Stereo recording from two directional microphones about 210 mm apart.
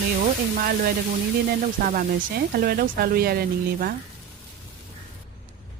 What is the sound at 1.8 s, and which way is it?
Speech, 40° right (ahead or behind).